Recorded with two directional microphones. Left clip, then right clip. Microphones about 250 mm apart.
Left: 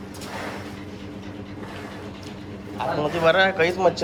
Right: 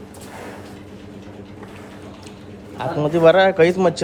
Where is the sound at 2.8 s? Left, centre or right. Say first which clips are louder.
Right 6 dB; right.